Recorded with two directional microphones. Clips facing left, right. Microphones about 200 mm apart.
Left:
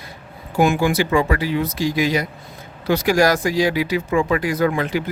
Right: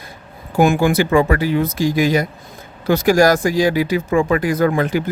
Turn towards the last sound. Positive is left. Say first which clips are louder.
# right 3 dB
turn(degrees=-45)  # may be behind; listen again after turning